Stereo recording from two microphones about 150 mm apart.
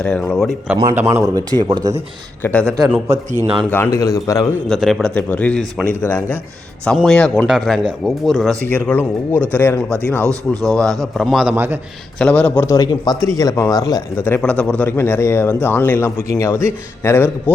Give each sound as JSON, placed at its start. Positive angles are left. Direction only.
{"t": 0.0, "sound": "a man's voice", "side_deg": 5}
{"t": 0.9, "sound": "a man's voice", "side_deg": -15}
{"t": 2.4, "sound": "speech", "side_deg": 10}
{"t": 3.1, "sound": "a man's voice", "side_deg": -50}
{"t": 3.7, "sound": "a man's voice", "side_deg": 15}
{"t": 4.7, "sound": "a man's voice", "side_deg": 0}
{"t": 8.6, "sound": "speech", "side_deg": 10}
{"t": 10.2, "sound": "speech", "side_deg": -25}
{"t": 11.0, "sound": "a man's voice", "side_deg": 0}
{"t": 11.5, "sound": "a man's voice", "side_deg": -15}
{"t": 12.2, "sound": "speech", "side_deg": 10}
{"t": 12.6, "sound": "speech", "side_deg": 25}